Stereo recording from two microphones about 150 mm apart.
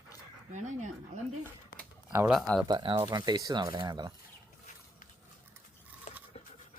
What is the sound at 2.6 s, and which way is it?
Speech, 35° right (ahead or behind).